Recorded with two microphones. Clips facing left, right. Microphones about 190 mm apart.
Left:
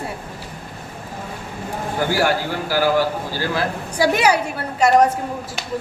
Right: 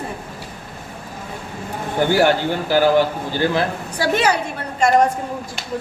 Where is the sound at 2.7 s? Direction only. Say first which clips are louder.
Right 3 dB; 25° right (ahead or behind).